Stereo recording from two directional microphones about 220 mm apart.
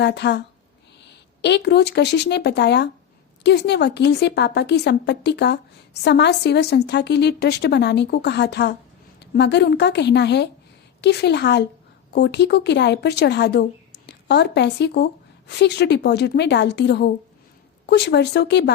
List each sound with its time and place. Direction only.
0.0 s a woman's voice: 50° left (ahead or behind)